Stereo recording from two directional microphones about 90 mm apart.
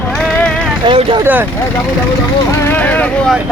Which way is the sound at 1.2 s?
20° right (ahead or behind).